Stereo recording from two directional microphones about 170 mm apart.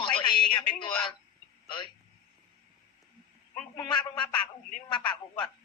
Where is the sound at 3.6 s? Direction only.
5° left (ahead or behind).